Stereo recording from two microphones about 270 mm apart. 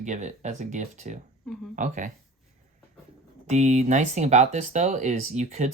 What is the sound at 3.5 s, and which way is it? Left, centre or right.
Speech, right.